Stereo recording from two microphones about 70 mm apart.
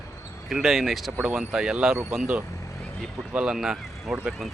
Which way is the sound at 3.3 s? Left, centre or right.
Centre.